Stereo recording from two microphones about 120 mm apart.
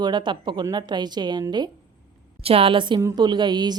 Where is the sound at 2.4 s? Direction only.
55° right (ahead or behind); by 3.8 s 35° right (ahead or behind).